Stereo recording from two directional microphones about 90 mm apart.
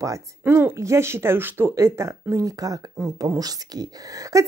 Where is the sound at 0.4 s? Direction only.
25° right (ahead or behind).